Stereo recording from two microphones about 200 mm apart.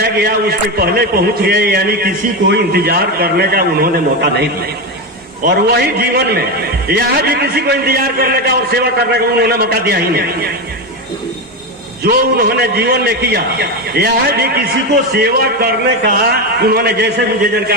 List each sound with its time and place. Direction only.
0.0 s a man's voice: 50° right (ahead or behind)
5.7 s a man's voice: 50° right (ahead or behind)
12.0 s a man's voice: 50° right (ahead or behind)